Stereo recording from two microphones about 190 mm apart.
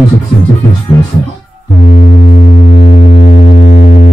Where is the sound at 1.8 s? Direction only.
50° left (ahead or behind).